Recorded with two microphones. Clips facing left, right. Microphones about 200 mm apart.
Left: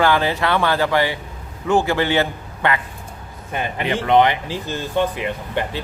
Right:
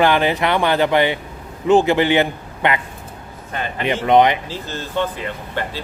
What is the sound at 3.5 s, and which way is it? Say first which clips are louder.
Speech: left 1 dB; 15° left (ahead or behind).